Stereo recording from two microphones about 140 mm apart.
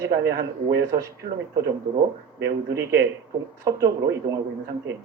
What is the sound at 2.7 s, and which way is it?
Speech, 20° right (ahead or behind).